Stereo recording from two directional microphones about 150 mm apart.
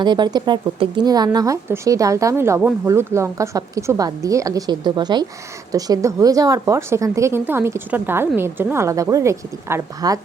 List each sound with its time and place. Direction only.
0.0 s speech: 30° right (ahead or behind)